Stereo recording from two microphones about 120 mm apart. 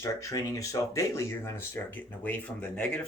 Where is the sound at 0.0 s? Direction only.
25° left (ahead or behind).